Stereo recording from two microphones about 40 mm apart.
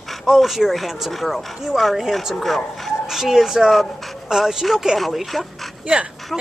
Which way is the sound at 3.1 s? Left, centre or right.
Centre.